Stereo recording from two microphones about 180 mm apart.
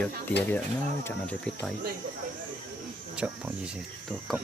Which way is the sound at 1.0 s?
15° left (ahead or behind).